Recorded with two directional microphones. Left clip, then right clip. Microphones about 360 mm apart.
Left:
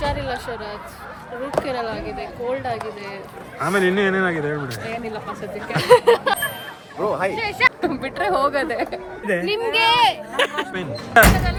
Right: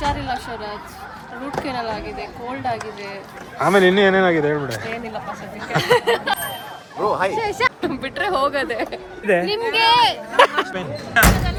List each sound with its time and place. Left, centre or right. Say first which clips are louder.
0.0 s speech: right 1 dB; centre
7.3 s a woman's voice: left 1 dB; centre
7.8 s speech: even; centre
9.2 s a woman's voice: right 5 dB; right
9.7 s speech: right 1 dB; centre
10.3 s a woman's voice: right 7 dB; centre
10.8 s speech: left 5 dB; centre